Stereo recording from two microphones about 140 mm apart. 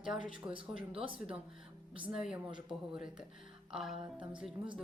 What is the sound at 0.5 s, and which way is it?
Speech, 40° right (ahead or behind).